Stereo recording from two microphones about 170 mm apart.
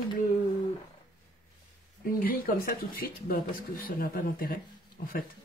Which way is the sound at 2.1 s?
60° left (ahead or behind).